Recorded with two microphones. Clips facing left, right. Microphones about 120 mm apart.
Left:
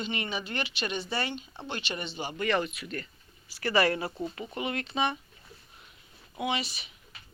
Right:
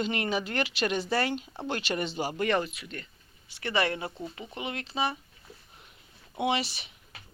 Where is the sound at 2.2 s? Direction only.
60° right (ahead or behind).